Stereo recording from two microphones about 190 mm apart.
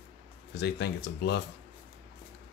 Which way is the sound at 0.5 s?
60° left (ahead or behind).